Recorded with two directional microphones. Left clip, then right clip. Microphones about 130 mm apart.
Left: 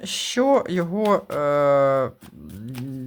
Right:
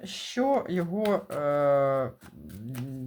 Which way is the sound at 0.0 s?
50° left (ahead or behind).